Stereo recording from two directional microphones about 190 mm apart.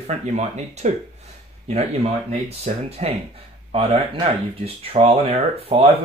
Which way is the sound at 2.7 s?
35° right (ahead or behind).